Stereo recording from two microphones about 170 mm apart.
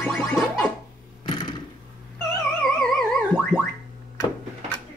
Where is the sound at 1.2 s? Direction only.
25° left (ahead or behind).